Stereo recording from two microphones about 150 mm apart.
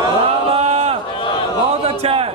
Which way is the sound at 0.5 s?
40° right (ahead or behind).